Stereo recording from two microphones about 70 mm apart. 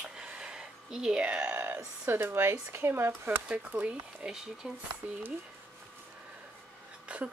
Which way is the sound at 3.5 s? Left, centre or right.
Centre.